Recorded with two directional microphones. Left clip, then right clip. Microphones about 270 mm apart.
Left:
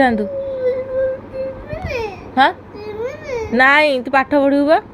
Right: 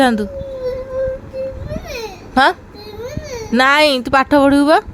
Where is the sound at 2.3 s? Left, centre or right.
Right.